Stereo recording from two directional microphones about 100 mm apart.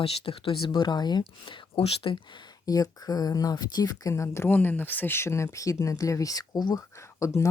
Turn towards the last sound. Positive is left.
turn(degrees=30)  # may be behind; listen again after turning